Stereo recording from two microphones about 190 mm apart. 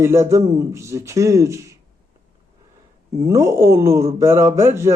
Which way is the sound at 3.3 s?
15° right (ahead or behind).